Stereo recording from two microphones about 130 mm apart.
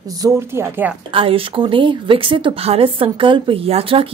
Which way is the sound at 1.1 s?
45° right (ahead or behind).